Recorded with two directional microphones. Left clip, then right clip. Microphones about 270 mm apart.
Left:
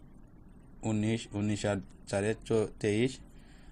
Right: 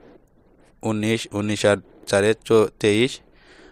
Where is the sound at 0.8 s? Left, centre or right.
Right.